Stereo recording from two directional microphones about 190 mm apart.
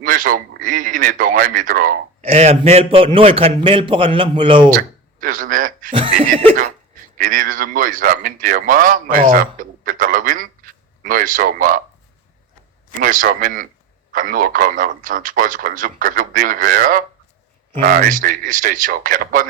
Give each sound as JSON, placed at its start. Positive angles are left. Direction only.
{"t": 0.0, "sound": "a man's voice", "side_deg": -45}
{"t": 2.2, "sound": "a man's voice", "side_deg": -35}
{"t": 4.7, "sound": "speech", "side_deg": -45}
{"t": 5.9, "sound": "a man's voice", "side_deg": -30}
{"t": 7.2, "sound": "a man's voice", "side_deg": -45}
{"t": 13.0, "sound": "a man's voice", "side_deg": -45}